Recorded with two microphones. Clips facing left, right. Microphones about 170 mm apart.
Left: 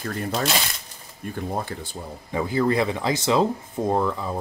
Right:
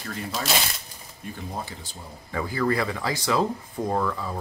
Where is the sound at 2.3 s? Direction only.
20° left (ahead or behind).